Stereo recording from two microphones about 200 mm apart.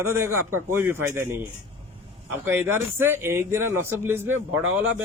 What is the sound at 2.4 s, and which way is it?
A man's voice, 10° right (ahead or behind).